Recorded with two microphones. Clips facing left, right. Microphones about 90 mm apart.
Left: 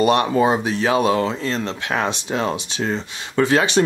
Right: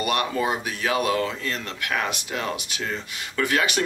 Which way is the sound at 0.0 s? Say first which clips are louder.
Left 8 dB; 30° left (ahead or behind).